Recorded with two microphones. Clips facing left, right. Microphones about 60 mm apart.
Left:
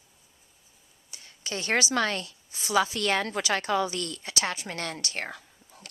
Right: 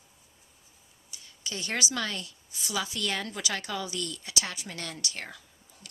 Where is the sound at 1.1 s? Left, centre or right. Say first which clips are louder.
Left 4 dB; left.